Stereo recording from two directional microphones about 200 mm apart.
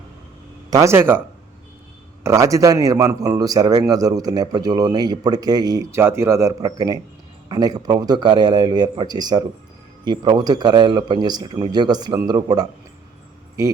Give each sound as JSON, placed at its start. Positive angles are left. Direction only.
{"t": 0.7, "sound": "a man's voice", "side_deg": -15}
{"t": 2.2, "sound": "a man's voice", "side_deg": -15}